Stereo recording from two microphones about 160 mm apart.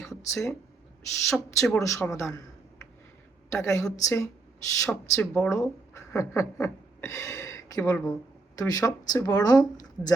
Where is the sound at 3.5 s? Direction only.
20° left (ahead or behind).